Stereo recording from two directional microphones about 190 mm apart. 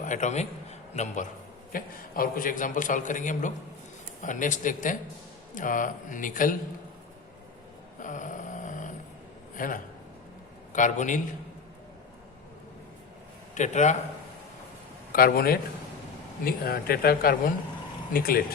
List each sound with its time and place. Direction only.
0.0 s a man's voice: 40° left (ahead or behind)
7.9 s a sound: 40° left (ahead or behind)
9.6 s a man's voice: 45° left (ahead or behind)
13.5 s a man's voice: 40° left (ahead or behind)
15.1 s a man's voice: 50° left (ahead or behind)